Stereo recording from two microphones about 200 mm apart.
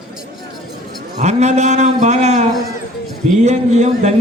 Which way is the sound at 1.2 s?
35° right (ahead or behind).